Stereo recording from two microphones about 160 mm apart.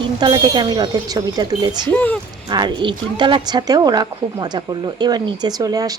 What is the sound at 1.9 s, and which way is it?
Speech, 10° left (ahead or behind).